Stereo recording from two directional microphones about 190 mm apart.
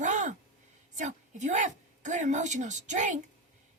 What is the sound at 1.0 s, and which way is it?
A woman's voice, 40° right (ahead or behind).